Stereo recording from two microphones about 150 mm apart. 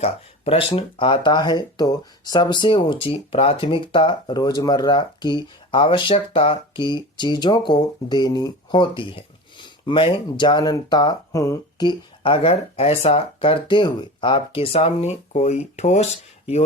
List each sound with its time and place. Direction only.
0.0 s speech: 40° left (ahead or behind)